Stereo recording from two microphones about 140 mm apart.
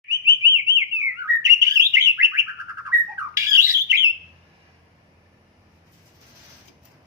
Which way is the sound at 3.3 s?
20° right (ahead or behind).